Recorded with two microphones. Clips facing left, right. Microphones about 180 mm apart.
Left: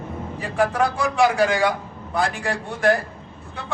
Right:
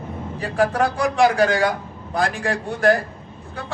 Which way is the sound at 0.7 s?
35° right (ahead or behind).